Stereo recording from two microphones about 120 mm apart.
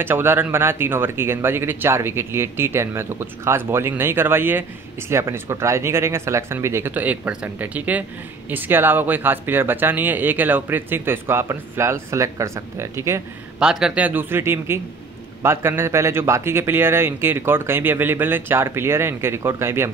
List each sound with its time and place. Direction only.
0.0 s speech: 20° right (ahead or behind)
13.6 s speech: 5° right (ahead or behind); by 19.9 s 20° right (ahead or behind)